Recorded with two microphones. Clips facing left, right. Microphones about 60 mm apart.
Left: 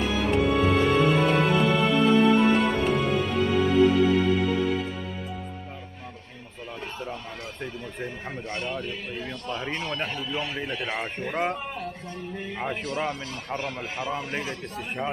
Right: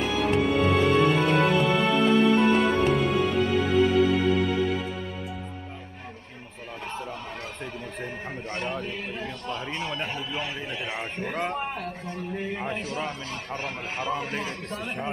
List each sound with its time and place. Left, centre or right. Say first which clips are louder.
0.1 s music: even; centre
8.5 s speech: even; right
9.8 s speech: left 1 dB; centre
12.1 s speech: right 3 dB; right
12.8 s speech: left 2 dB; left
13.6 s a man's voice: even; right
14.5 s a man's voice: right 1 dB; right